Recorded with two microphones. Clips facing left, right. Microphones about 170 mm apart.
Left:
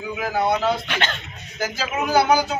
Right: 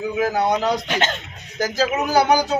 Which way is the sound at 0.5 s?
40° right (ahead or behind).